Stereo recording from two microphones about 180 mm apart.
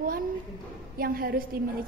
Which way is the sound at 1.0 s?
55° right (ahead or behind).